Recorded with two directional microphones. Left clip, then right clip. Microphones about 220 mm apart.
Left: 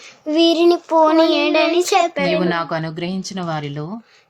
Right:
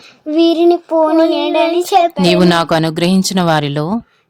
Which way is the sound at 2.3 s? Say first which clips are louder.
Right 8 dB; 50° right (ahead or behind).